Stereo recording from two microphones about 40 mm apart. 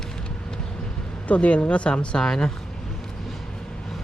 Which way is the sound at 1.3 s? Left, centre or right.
Left.